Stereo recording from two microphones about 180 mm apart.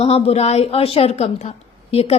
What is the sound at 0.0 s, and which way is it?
A woman's voice, 35° left (ahead or behind).